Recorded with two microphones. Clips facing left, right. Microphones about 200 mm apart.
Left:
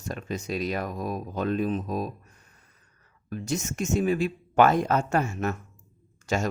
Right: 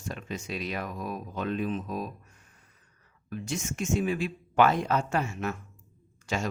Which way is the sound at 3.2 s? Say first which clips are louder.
Left 4 dB; 40° left (ahead or behind).